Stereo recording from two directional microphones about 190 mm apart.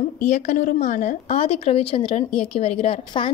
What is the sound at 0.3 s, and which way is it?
A woman's voice, 40° left (ahead or behind).